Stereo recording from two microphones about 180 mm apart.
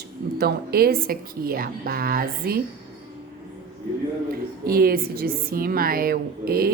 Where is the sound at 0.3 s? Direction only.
60° right (ahead or behind).